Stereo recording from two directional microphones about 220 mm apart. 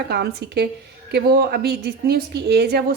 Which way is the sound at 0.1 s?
50° right (ahead or behind).